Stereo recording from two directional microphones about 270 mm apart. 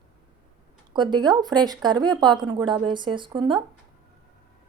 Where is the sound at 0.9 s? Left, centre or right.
Centre.